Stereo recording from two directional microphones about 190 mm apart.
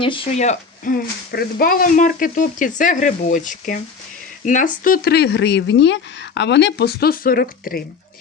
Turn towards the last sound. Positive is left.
turn(degrees=55)  # may be behind; listen again after turning